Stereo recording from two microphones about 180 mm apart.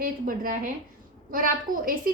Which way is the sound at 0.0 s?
50° right (ahead or behind).